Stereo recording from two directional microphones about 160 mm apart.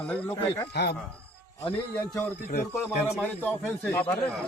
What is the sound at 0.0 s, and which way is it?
Speech, 10° left (ahead or behind).